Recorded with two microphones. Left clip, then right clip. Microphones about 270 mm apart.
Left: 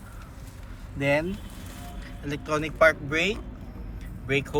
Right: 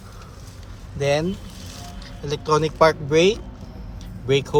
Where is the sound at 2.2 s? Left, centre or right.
Centre.